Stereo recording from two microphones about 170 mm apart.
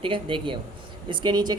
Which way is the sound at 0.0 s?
30° right (ahead or behind).